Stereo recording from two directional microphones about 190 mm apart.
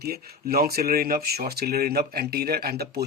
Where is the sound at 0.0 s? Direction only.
55° right (ahead or behind).